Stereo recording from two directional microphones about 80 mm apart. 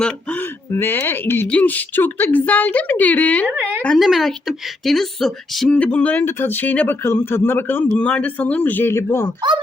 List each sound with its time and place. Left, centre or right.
0.0 s speech: centre
0.7 s speech: left
3.4 s a woman's voice: right
3.9 s speech: centre
5.6 s speech: centre
7.9 s speech: centre